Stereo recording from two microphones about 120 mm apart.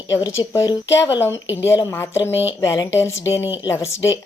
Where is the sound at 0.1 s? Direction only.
25° left (ahead or behind).